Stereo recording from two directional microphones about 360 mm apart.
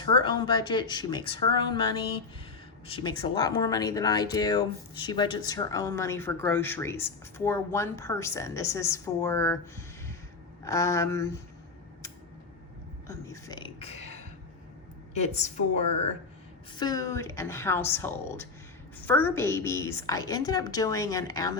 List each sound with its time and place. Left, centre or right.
0.0 s speech: centre
13.1 s a sound: centre
15.1 s a woman's voice: centre